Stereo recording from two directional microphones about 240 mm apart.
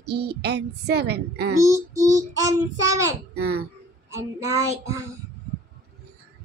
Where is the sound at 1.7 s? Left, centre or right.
Centre.